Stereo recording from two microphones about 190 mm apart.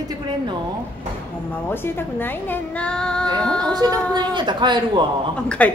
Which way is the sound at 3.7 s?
20° right (ahead or behind).